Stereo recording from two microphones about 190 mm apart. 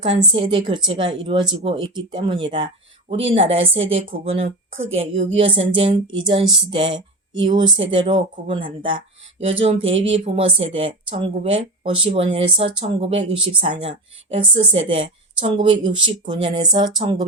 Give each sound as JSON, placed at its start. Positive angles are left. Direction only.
{"t": 0.0, "sound": "speech", "side_deg": -25}